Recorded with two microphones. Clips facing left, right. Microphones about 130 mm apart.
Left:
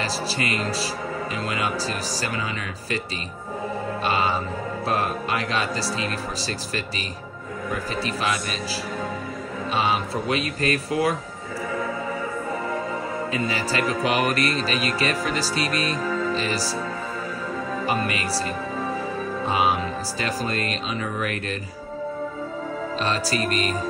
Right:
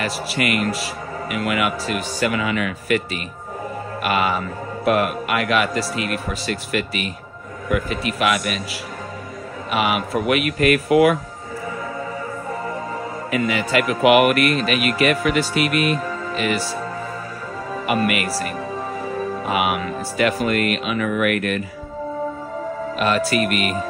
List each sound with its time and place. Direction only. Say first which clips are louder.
0.0 s speech: right 3 dB; 30° left (ahead or behind)
4.0 s speech: right 4 dB; 30° left (ahead or behind)
9.7 s speech: right 3 dB; 30° left (ahead or behind)
13.3 s speech: right 8 dB; 30° left (ahead or behind)
17.8 s speech: right 6 dB; 30° left (ahead or behind)
22.9 s speech: right 6 dB; 30° left (ahead or behind)